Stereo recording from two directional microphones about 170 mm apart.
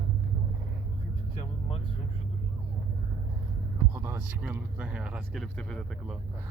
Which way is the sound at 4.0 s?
15° right (ahead or behind).